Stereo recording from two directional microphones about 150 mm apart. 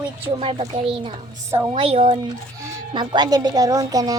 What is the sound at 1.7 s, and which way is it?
Speech, 35° right (ahead or behind).